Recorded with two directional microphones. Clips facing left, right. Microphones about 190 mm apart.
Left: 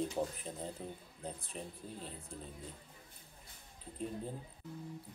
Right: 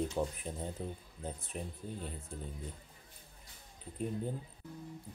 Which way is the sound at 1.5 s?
5° right (ahead or behind).